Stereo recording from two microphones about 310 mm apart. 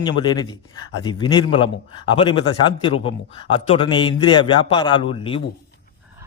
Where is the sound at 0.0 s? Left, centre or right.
Centre.